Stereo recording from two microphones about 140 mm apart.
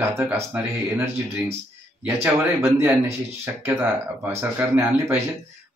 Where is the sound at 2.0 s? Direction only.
15° right (ahead or behind).